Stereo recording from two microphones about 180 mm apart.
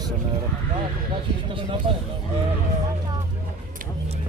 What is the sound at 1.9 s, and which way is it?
Speech, 35° right (ahead or behind).